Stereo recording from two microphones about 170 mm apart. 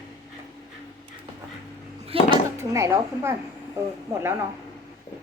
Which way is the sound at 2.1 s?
35° right (ahead or behind).